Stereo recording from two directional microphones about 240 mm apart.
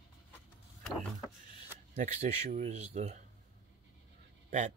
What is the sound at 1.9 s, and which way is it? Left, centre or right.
Speech, right.